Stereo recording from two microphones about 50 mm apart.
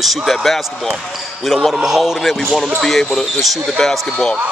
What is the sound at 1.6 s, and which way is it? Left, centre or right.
Speech, centre.